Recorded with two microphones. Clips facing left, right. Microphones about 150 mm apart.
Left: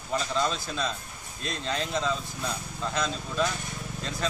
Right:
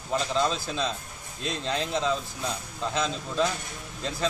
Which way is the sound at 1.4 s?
30° right (ahead or behind).